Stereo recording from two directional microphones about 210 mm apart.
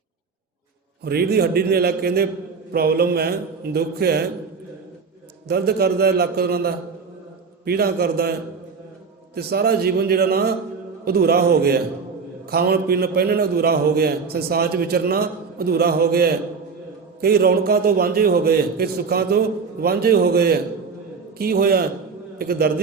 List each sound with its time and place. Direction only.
1.0 s a man's voice: 50° right (ahead or behind)
5.5 s a man's voice: 50° right (ahead or behind)